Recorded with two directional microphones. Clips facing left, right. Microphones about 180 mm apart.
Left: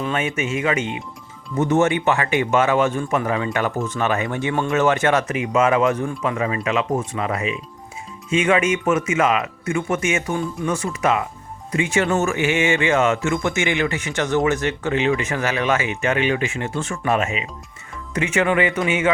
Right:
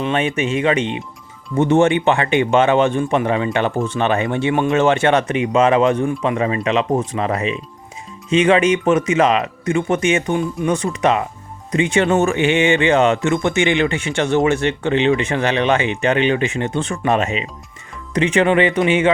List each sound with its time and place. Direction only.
0.0 s speech: 30° right (ahead or behind)